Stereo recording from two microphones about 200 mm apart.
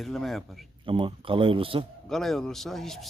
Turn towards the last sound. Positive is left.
turn(degrees=0)  # may be behind; listen again after turning